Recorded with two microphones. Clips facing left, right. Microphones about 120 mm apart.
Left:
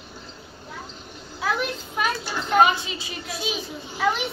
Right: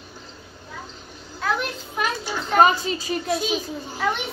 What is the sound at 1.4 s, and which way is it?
Speech, 5° left (ahead or behind).